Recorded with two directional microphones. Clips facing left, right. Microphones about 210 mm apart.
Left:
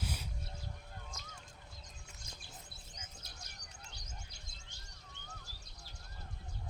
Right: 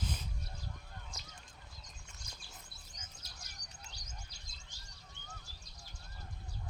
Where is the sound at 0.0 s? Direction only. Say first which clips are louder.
Right 1 dB; 10° left (ahead or behind).